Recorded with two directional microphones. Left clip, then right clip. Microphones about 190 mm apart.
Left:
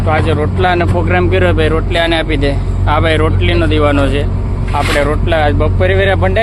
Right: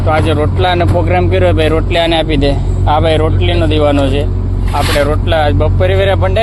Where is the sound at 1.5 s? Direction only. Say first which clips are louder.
Right 1 dB; 15° right (ahead or behind).